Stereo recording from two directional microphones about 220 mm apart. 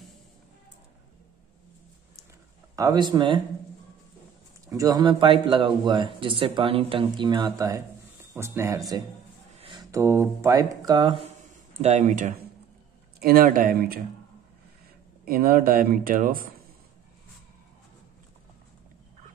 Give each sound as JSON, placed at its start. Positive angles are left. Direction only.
{"t": 2.7, "sound": "speech", "side_deg": -15}
{"t": 4.6, "sound": "speech", "side_deg": -15}
{"t": 11.7, "sound": "speech", "side_deg": -30}
{"t": 15.2, "sound": "speech", "side_deg": -40}